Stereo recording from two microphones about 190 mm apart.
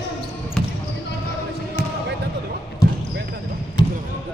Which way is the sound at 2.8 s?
20° left (ahead or behind).